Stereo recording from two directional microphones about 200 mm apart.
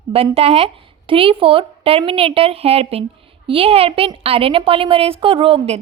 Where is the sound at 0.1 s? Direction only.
30° right (ahead or behind).